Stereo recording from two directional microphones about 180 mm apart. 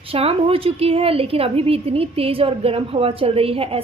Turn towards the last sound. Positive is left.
turn(degrees=-30)  # may be behind; listen again after turning